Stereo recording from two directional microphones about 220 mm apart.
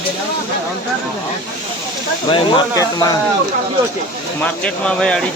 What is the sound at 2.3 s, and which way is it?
Speech, 15° left (ahead or behind).